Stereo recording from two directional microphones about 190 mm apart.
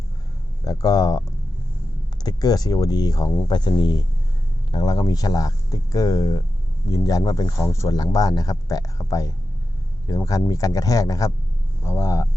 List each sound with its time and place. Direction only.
0.6 s speech: 20° left (ahead or behind)
2.2 s speech: 20° left (ahead or behind)